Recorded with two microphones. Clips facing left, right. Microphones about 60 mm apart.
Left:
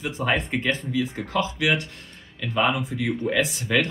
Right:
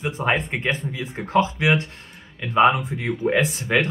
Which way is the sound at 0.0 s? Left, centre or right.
Right.